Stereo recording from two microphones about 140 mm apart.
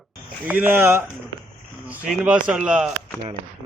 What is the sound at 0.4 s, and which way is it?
Speech, 10° right (ahead or behind).